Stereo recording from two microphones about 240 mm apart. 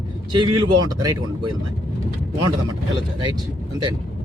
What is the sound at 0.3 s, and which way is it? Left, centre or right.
A man's voice, centre.